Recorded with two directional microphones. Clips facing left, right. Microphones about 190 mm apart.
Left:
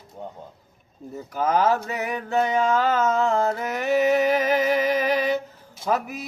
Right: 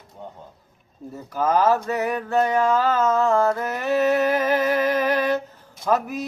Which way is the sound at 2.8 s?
20° left (ahead or behind).